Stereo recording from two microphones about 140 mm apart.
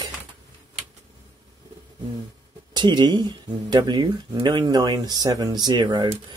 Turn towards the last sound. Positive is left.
turn(degrees=-30)  # may be behind; listen again after turning